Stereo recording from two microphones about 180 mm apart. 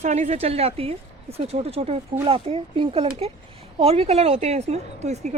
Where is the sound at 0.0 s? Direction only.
40° right (ahead or behind).